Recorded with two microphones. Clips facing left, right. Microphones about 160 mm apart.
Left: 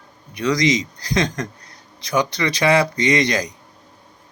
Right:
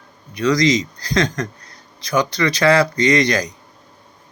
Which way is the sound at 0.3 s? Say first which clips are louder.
Right 3 dB; 20° left (ahead or behind).